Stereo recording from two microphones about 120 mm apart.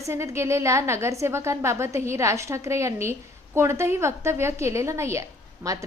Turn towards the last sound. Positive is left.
turn(degrees=-30)  # may be behind; listen again after turning